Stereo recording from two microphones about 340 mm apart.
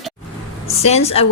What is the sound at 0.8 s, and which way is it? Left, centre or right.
Speech, centre.